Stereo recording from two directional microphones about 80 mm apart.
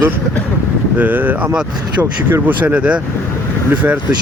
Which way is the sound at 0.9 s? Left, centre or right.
Right.